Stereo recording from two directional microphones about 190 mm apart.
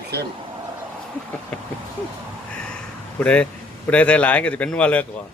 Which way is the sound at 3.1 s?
5° left (ahead or behind).